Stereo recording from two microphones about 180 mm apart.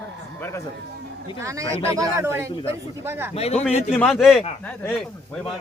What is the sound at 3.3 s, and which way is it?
Speech, 35° left (ahead or behind).